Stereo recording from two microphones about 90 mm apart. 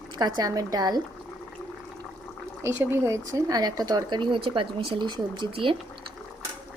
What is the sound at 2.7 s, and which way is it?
Speech, 25° right (ahead or behind).